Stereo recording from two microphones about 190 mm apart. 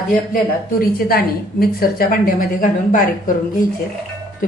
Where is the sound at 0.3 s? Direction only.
50° left (ahead or behind).